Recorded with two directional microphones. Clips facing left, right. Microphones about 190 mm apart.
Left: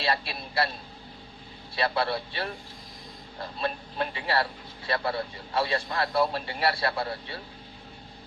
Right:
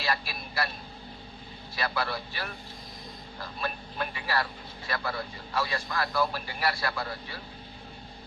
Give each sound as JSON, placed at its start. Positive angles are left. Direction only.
{"t": 0.0, "sound": "a man's voice", "side_deg": 25}
{"t": 1.7, "sound": "a man's voice", "side_deg": 25}